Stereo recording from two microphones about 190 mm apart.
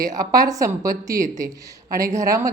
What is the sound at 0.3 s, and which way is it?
A woman's voice, 20° right (ahead or behind).